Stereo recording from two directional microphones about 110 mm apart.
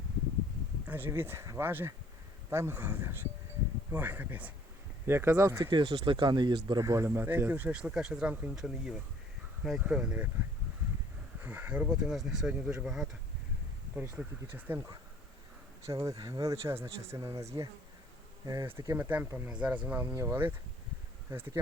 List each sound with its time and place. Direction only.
0.9 s speech: 15° right (ahead or behind)
5.7 s speech: 50° right (ahead or behind)
6.8 s speech: 25° right (ahead or behind); by 10.2 s 10° right (ahead or behind)
11.4 s speech: 15° right (ahead or behind)
14.2 s speech: 15° right (ahead or behind)
15.9 s speech: 30° right (ahead or behind)